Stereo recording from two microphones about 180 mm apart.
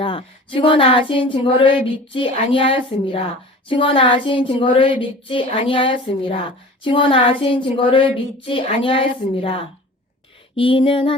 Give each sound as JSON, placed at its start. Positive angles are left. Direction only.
{"t": 0.0, "sound": "speech", "side_deg": 30}